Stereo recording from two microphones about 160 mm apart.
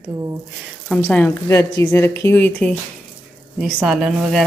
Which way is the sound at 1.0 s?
10° left (ahead or behind).